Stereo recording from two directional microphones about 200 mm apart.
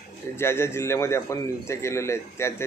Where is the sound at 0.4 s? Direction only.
10° left (ahead or behind).